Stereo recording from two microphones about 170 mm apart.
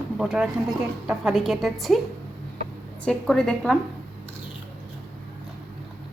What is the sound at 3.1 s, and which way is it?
Speech, 5° left (ahead or behind).